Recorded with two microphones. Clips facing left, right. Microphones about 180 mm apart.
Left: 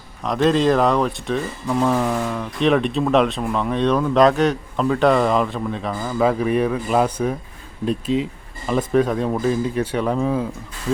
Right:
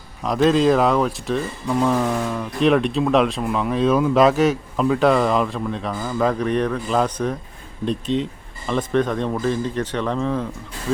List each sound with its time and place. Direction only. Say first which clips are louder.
0.2 s speech: right 1 dB; centre (ahead or behind)